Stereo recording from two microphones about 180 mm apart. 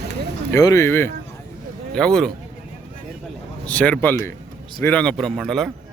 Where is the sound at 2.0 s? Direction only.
5° left (ahead or behind).